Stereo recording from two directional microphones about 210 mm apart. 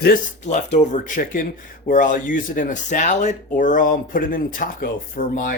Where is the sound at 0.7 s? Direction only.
35° left (ahead or behind).